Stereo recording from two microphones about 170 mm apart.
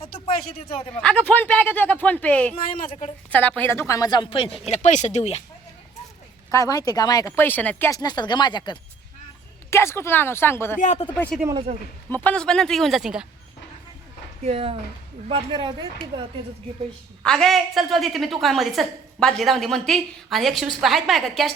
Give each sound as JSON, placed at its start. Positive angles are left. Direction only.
{"t": 0.0, "sound": "a sound", "side_deg": 35}
{"t": 1.0, "sound": "speech", "side_deg": 5}
{"t": 2.6, "sound": "speech", "side_deg": 55}
{"t": 3.2, "sound": "speech", "side_deg": 10}
{"t": 6.5, "sound": "speech", "side_deg": 20}
{"t": 7.9, "sound": "speech", "side_deg": 25}
{"t": 9.6, "sound": "speech", "side_deg": 15}
{"t": 10.8, "sound": "speech", "side_deg": 45}
{"t": 11.0, "sound": "a woman's voice", "side_deg": 10}
{"t": 14.4, "sound": "speech", "side_deg": -35}
{"t": 17.2, "sound": "a woman's voice", "side_deg": 0}